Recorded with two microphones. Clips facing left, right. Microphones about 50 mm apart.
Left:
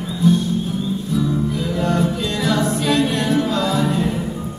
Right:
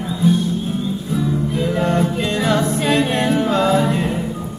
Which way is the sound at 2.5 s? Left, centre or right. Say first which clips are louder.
Even; right.